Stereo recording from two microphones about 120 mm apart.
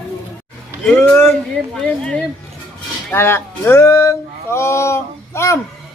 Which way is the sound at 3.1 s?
20° left (ahead or behind).